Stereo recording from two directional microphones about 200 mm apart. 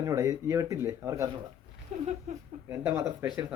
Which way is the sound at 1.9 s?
35° right (ahead or behind).